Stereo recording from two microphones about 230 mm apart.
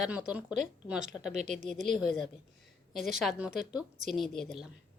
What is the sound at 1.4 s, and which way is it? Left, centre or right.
Speech, right.